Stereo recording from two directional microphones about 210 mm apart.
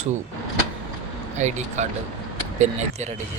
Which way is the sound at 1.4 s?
35° right (ahead or behind).